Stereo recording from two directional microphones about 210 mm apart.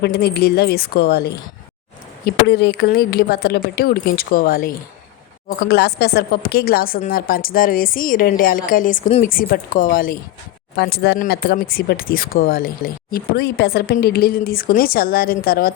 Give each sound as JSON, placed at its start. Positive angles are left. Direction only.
{"t": 0.0, "sound": "speech", "side_deg": 50}